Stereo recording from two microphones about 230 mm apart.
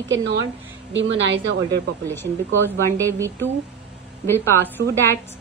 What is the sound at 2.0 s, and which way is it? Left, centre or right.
Speech, centre.